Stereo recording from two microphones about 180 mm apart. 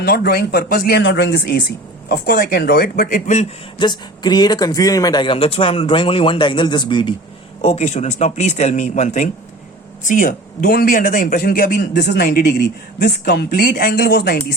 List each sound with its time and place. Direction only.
0.0 s a man's voice: 60° left (ahead or behind)
3.8 s speech: 25° left (ahead or behind)
7.6 s a man's voice: 40° left (ahead or behind); by 14.4 s 60° left (ahead or behind)